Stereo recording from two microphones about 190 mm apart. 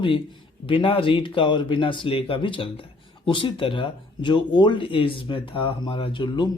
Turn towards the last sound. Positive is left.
turn(degrees=25)  # may be behind; listen again after turning